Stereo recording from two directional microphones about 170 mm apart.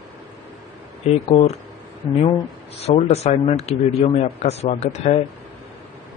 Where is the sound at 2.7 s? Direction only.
40° left (ahead or behind).